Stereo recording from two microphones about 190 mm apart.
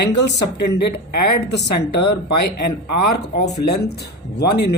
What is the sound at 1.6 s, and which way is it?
Speech, 60° left (ahead or behind).